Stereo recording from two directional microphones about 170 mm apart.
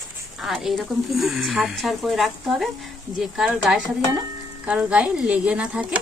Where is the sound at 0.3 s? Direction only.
Centre (ahead or behind).